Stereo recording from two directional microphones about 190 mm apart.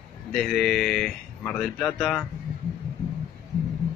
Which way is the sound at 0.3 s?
Centre (ahead or behind).